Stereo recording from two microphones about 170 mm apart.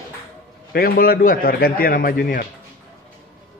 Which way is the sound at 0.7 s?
60° left (ahead or behind).